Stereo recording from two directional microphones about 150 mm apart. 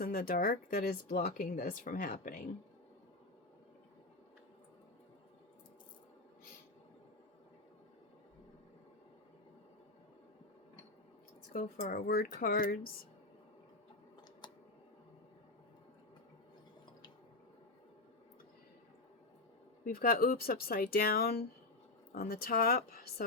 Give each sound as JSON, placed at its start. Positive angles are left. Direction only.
{"t": 0.0, "sound": "speech", "side_deg": 80}
{"t": 11.5, "sound": "speech", "side_deg": 70}
{"t": 14.4, "sound": "a sound", "side_deg": 30}
{"t": 19.8, "sound": "speech", "side_deg": 80}